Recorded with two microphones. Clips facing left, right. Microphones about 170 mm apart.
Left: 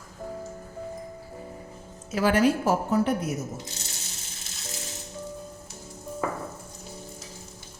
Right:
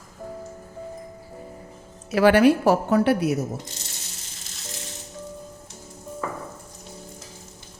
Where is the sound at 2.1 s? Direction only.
70° right (ahead or behind).